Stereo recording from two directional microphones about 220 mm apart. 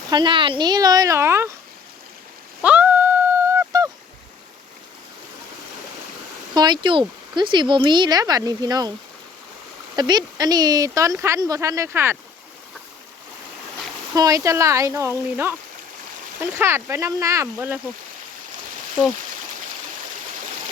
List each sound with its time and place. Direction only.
0.1 s speech: 20° right (ahead or behind)
2.6 s a sound: 5° right (ahead or behind)
6.5 s speech: 20° right (ahead or behind)
9.9 s speech: 20° right (ahead or behind)
14.2 s speech: 15° right (ahead or behind)
16.6 s speech: 10° right (ahead or behind)